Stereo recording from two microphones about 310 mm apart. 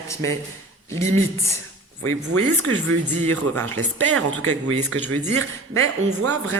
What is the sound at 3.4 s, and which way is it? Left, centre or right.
Speech, right.